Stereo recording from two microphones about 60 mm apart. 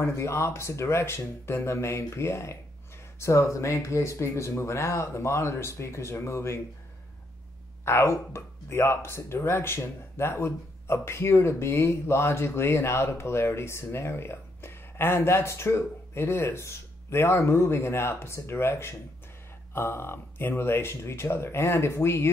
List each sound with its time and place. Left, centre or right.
0.0 s speech: left
7.8 s speech: left